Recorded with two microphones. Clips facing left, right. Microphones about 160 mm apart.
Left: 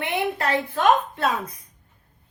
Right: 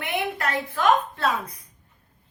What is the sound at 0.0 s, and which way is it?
A woman's voice, 30° left (ahead or behind).